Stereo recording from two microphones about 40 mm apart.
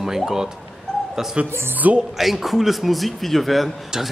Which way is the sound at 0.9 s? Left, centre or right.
Centre.